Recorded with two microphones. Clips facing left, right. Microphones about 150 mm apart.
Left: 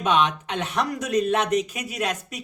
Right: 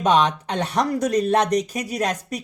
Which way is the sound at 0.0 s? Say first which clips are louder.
Right 3 dB; 35° right (ahead or behind).